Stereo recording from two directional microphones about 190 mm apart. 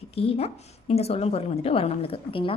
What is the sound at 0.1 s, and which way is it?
A woman's voice, 30° left (ahead or behind).